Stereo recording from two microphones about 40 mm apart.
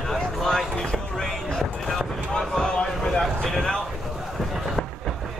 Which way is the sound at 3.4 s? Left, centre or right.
Centre.